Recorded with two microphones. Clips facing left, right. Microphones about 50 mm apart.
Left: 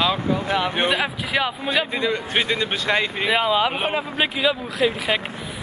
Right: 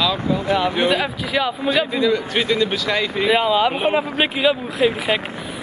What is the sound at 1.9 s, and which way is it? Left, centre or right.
Speech, left.